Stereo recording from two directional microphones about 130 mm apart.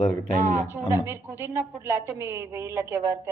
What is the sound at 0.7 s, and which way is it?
A woman's voice, 15° right (ahead or behind).